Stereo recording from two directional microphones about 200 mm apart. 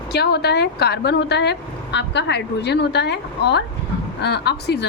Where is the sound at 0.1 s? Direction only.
55° left (ahead or behind).